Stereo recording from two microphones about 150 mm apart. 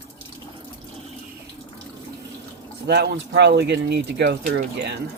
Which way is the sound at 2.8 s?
90° right.